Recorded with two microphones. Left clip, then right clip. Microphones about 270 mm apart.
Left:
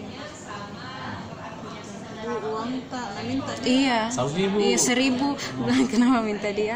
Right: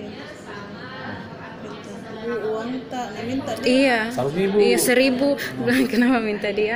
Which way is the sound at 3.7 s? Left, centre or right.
Centre.